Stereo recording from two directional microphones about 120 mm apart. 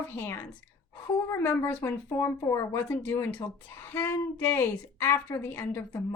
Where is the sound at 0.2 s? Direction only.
20° left (ahead or behind).